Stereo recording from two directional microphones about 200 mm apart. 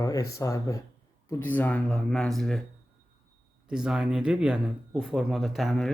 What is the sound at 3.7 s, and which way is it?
Speech, 5° right (ahead or behind).